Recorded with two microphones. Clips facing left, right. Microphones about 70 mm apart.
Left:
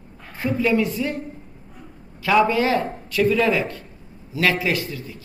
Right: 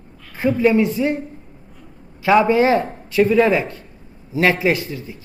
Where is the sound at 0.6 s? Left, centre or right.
Right.